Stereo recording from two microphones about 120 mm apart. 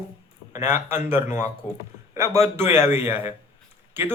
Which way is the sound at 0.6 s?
20° right (ahead or behind).